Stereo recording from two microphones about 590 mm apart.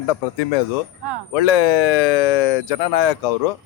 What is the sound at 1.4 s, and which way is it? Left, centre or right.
A man's voice, left.